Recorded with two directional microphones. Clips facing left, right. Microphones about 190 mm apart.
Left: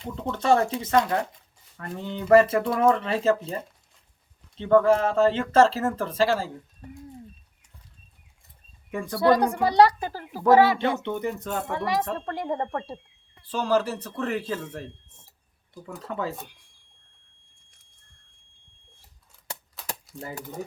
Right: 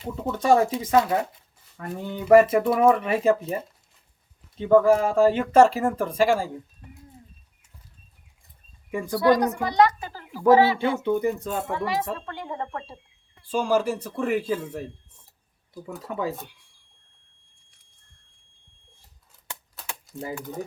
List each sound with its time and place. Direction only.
0.0 s speech: 5° right (ahead or behind)
4.5 s speech: 10° right (ahead or behind)
8.9 s speech: 10° right (ahead or behind)
9.4 s a woman's voice: 30° left (ahead or behind)
10.4 s speech: 10° right (ahead or behind)
12.2 s a woman's voice: 35° left (ahead or behind)
13.4 s speech: 10° right (ahead or behind)
20.4 s speech: centre (ahead or behind)